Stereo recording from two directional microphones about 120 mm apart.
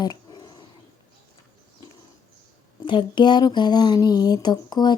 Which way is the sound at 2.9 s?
40° left (ahead or behind).